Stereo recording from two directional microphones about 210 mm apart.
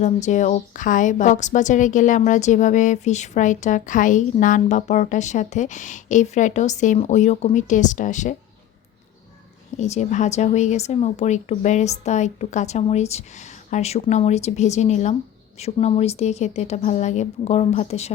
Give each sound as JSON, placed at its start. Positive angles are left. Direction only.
{"t": 0.0, "sound": "a woman's voice", "side_deg": 35}
{"t": 9.7, "sound": "a woman's voice", "side_deg": 35}